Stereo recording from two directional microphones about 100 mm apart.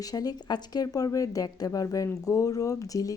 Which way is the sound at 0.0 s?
40° left (ahead or behind).